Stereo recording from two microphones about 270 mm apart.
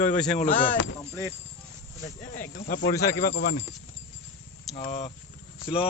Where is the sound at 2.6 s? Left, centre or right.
Left.